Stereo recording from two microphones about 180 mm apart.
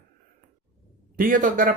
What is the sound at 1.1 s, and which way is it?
Speech, 50° right (ahead or behind).